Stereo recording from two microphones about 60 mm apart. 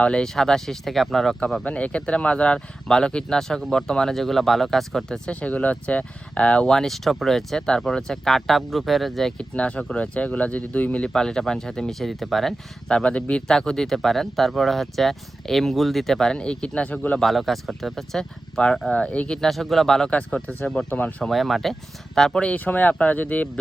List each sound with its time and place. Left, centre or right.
0.0 s speech: centre
1.6 s speech: left
5.3 s speech: left; by 9.3 s centre
9.4 s speech: centre
11.1 s speech: centre
17.2 s speech: centre; by 19.4 s left
19.4 s speech: centre
20.1 s speech: left
21.2 s speech: centre; by 23.5 s left